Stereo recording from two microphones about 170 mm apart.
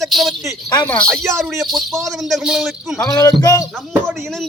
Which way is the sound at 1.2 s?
15° right (ahead or behind).